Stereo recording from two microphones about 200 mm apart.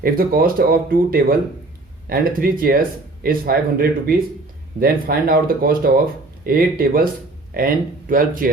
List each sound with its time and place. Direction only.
0.0 s speech: 45° right (ahead or behind)